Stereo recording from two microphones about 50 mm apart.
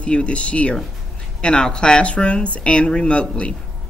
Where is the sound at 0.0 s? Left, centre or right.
Left.